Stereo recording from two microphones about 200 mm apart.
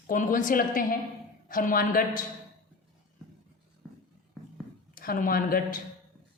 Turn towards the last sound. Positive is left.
turn(degrees=45)  # may be behind; listen again after turning